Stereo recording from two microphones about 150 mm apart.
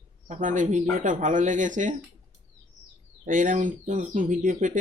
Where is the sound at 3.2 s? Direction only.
60° right (ahead or behind).